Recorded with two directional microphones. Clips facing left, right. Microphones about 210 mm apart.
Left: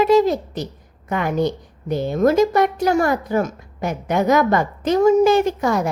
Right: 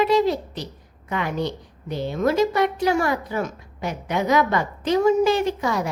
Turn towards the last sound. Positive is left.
turn(degrees=45)  # may be behind; listen again after turning